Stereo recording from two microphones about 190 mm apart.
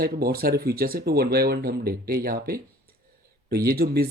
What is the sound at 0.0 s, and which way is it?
Speech, 55° right (ahead or behind).